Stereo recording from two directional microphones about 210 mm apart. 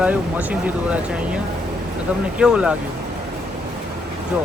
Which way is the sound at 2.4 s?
5° right (ahead or behind).